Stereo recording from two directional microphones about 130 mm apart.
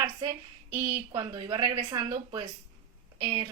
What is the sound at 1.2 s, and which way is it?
Speech, 35° right (ahead or behind).